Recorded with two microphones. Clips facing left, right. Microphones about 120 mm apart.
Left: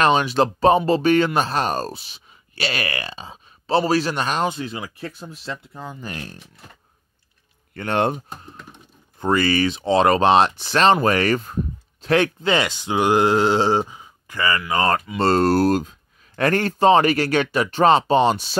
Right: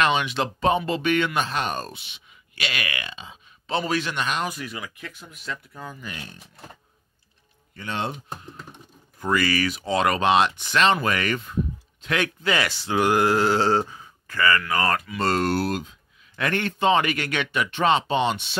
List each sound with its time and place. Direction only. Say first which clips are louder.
0.0 s speech: left 5 dB; 35° left (ahead or behind)
6.0 s speech: left 5 dB; 40° left (ahead or behind)
7.7 s speech: left 9 dB; 60° left (ahead or behind)
9.2 s speech: left 4 dB; 30° left (ahead or behind)